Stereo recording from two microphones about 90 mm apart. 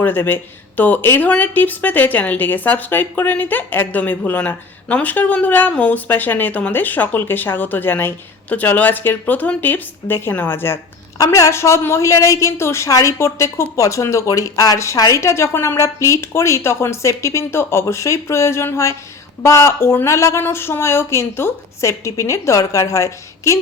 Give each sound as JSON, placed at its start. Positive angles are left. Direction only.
{"t": 0.0, "sound": "a woman's voice", "side_deg": 25}